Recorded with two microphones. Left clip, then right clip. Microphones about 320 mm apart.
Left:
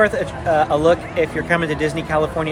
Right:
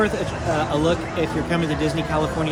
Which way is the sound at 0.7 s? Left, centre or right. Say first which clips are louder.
Left 5 dB; centre.